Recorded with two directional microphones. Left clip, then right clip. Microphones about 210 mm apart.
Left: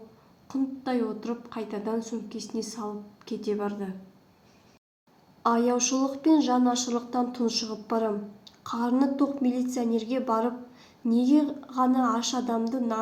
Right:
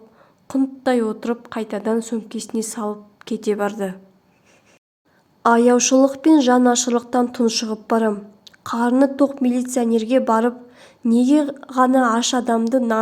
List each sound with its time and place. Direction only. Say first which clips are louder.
0.4 s a woman's voice: right 11 dB; 50° right (ahead or behind)
5.4 s a woman's voice: right 10 dB; 45° right (ahead or behind)